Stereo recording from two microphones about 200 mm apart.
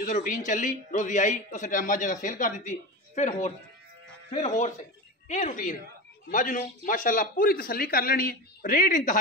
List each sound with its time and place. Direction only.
0.0 s a man's voice: 40° left (ahead or behind)